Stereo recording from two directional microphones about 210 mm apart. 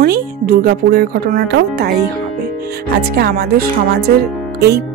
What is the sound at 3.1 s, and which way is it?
Speech, 45° right (ahead or behind).